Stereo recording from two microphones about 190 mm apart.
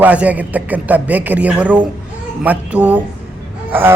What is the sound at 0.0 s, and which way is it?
A man's voice, 5° right (ahead or behind).